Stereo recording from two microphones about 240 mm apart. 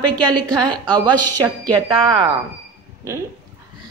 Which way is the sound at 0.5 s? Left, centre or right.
Centre.